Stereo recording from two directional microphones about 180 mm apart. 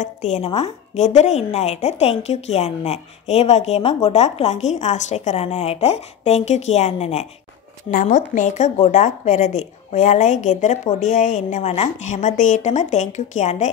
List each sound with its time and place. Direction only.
0.0 s a woman's voice: 40° left (ahead or behind)
7.9 s a woman's voice: 45° left (ahead or behind)